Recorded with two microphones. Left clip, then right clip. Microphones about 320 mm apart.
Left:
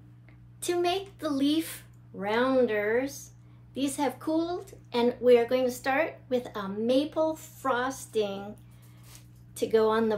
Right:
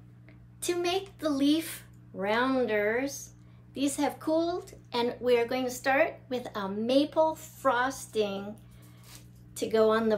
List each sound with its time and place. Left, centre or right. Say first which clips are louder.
0.6 s speech: left 2 dB; centre
9.6 s speech: left 1 dB; centre